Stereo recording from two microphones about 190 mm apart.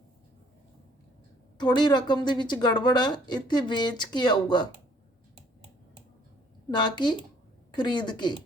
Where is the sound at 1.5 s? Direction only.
20° left (ahead or behind).